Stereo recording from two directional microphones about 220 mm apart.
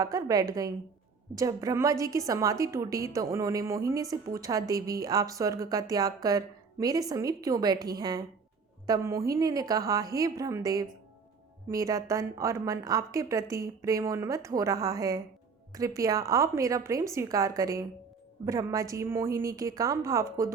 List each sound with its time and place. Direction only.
0.0 s a woman's voice: 15° right (ahead or behind)